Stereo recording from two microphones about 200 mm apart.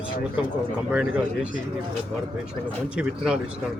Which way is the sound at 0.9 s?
5° right (ahead or behind).